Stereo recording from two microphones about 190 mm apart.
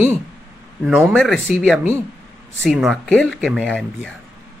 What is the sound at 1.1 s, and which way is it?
Speech, 5° left (ahead or behind).